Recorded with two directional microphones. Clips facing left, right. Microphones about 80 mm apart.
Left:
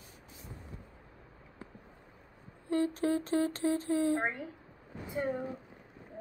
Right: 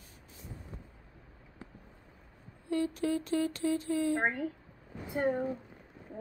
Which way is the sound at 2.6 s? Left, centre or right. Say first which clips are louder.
Left 1 dB; left.